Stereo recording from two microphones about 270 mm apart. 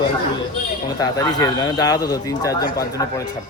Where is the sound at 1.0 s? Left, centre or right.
Centre.